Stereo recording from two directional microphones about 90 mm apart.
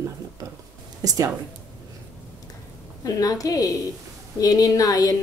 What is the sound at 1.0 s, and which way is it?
Speech, 40° right (ahead or behind).